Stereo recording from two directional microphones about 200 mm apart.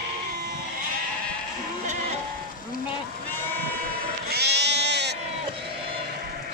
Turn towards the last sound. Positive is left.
turn(degrees=-60)  # may be behind; listen again after turning